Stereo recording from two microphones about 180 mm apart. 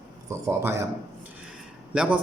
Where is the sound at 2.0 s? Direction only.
5° right (ahead or behind).